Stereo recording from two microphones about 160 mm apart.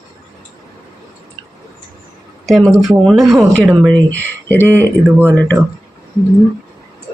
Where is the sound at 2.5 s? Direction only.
Centre (ahead or behind).